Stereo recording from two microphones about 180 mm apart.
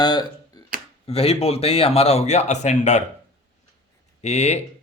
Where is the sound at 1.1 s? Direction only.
35° left (ahead or behind).